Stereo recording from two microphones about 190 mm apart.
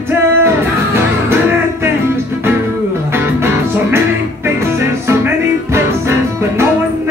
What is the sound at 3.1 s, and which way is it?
Music, 10° right (ahead or behind).